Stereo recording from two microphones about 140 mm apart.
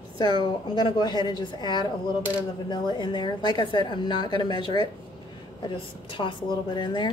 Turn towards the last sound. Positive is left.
turn(degrees=30)  # may be behind; listen again after turning